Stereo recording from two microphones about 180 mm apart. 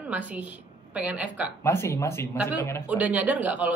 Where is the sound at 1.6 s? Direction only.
15° left (ahead or behind).